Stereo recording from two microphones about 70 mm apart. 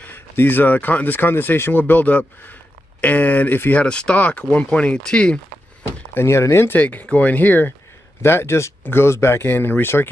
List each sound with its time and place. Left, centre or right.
0.0 s speech: left
3.8 s speech: centre
6.1 s speech: left
6.7 s speech: left
8.2 s speech: left